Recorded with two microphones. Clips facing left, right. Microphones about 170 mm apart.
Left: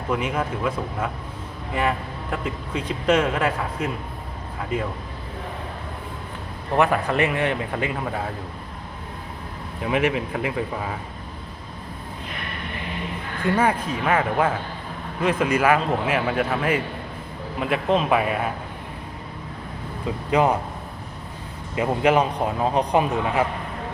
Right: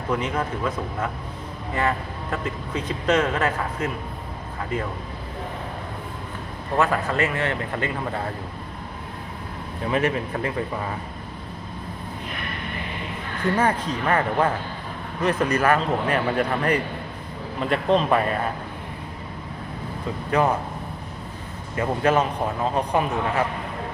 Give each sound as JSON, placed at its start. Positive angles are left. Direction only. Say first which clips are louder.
{"t": 0.1, "sound": "a man's voice", "louder": "left 1 dB", "side_deg": 10}
{"t": 2.3, "sound": "a man's voice", "louder": "even", "side_deg": 10}
{"t": 6.7, "sound": "a man's voice", "louder": "left 2 dB", "side_deg": 15}
{"t": 9.8, "sound": "a man's voice", "louder": "left 1 dB", "side_deg": 10}
{"t": 13.6, "sound": "a man's voice", "louder": "left 1 dB", "side_deg": 10}
{"t": 20.3, "sound": "a man's voice", "louder": "left 2 dB", "side_deg": 15}
{"t": 21.8, "sound": "a man's voice", "louder": "left 2 dB", "side_deg": 15}